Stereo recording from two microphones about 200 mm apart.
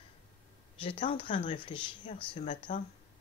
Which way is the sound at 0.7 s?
25° left (ahead or behind).